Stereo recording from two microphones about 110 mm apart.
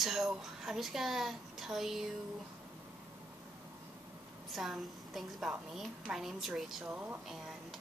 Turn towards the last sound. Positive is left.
turn(degrees=-15)  # may be behind; listen again after turning